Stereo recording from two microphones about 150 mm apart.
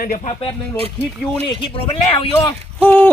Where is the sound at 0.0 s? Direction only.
55° left (ahead or behind).